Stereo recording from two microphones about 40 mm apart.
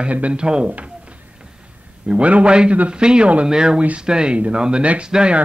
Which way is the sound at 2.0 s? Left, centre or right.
Right.